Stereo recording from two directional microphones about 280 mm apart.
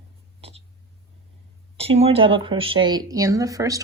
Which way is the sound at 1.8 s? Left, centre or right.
Right.